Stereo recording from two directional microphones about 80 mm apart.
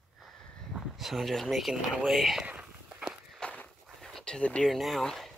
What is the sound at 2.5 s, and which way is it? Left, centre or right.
Walk, centre.